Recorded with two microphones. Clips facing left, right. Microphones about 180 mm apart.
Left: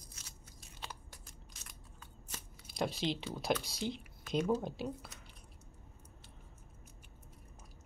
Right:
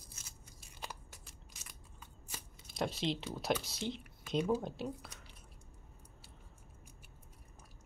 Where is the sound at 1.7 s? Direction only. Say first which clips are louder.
Right 1 dB; 5° right (ahead or behind).